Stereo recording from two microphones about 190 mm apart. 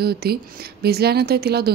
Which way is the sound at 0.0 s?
55° right (ahead or behind).